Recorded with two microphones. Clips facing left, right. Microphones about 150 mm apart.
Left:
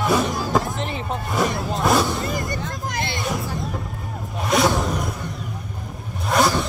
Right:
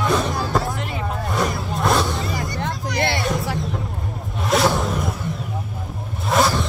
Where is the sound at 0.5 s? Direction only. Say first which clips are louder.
Left 1 dB; 20° left (ahead or behind).